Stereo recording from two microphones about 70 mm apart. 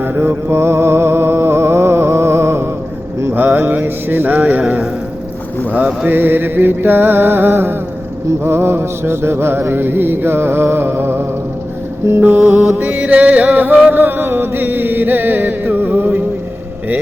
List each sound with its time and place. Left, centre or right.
0.0 s music: right
3.3 s music: right
4.6 s a sound: centre
6.1 s mantra: right
12.2 s chant: right